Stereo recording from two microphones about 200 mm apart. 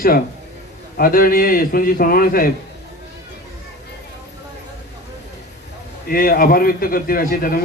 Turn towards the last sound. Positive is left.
turn(degrees=45)  # may be behind; listen again after turning